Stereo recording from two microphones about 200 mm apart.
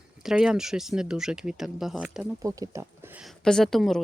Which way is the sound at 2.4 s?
15° right (ahead or behind).